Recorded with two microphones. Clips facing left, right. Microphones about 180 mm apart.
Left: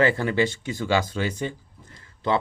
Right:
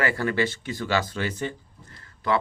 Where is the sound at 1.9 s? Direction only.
25° left (ahead or behind).